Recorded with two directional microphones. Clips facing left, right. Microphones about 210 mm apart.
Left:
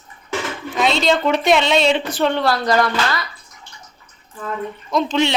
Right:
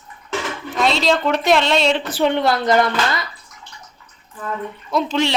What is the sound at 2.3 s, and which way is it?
Speech, 20° right (ahead or behind).